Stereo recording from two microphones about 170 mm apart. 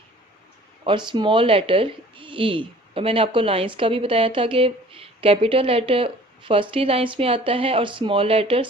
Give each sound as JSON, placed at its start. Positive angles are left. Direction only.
{"t": 0.9, "sound": "speech", "side_deg": -30}